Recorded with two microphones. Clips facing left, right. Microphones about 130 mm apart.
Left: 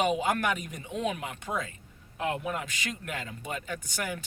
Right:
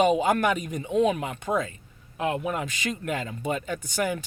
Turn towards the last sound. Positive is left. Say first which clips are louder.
# right 7 dB
turn(degrees=-25)  # may be behind; listen again after turning